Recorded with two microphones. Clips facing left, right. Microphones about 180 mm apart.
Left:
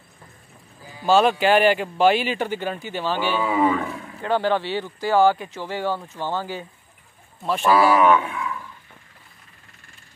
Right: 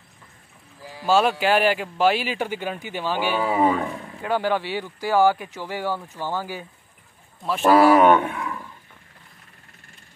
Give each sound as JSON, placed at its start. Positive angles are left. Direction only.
{"t": 1.0, "sound": "speech", "side_deg": -5}
{"t": 3.4, "sound": "speech", "side_deg": -35}
{"t": 4.2, "sound": "speech", "side_deg": -10}
{"t": 5.9, "sound": "speech", "side_deg": 15}
{"t": 6.3, "sound": "speech", "side_deg": -10}
{"t": 7.9, "sound": "speech", "side_deg": -60}
{"t": 8.3, "sound": "a sound", "side_deg": -40}